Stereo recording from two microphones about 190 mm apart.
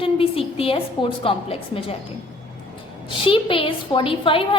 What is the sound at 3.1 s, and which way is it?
A woman's voice, 25° left (ahead or behind).